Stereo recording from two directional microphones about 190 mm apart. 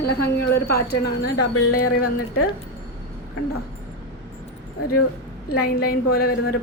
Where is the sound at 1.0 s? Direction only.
60° left (ahead or behind).